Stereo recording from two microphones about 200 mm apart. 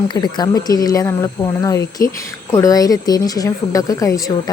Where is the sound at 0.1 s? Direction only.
20° left (ahead or behind).